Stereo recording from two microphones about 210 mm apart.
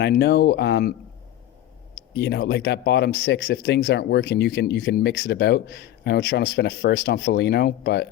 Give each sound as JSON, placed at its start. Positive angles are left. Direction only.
{"t": 0.0, "sound": "speech", "side_deg": 50}
{"t": 2.0, "sound": "speech", "side_deg": 55}